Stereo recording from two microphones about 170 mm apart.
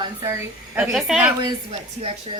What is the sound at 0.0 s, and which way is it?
Speech, 20° right (ahead or behind).